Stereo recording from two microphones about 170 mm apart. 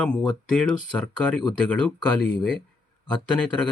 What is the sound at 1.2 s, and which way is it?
Speech, 5° left (ahead or behind).